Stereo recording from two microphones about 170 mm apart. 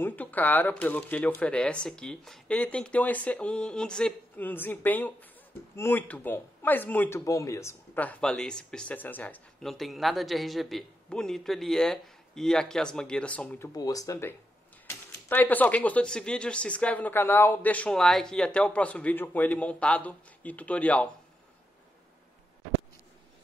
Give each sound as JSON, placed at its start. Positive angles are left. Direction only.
{"t": 0.0, "sound": "a man's voice", "side_deg": 10}
{"t": 13.7, "sound": "speech", "side_deg": 20}